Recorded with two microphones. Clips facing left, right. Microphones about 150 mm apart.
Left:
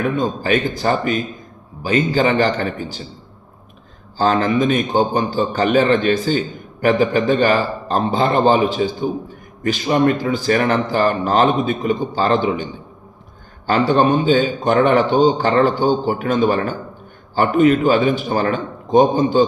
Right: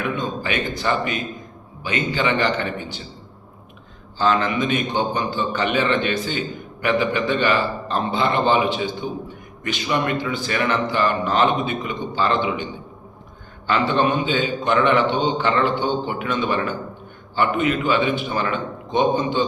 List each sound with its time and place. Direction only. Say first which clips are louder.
0.0 s a man's voice: left 5 dB; 40° left (ahead or behind)
4.2 s a man's voice: left 4 dB; 40° left (ahead or behind)
13.7 s a man's voice: left 5 dB; 40° left (ahead or behind)